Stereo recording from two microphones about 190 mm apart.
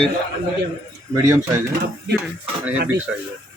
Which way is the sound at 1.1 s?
15° right (ahead or behind).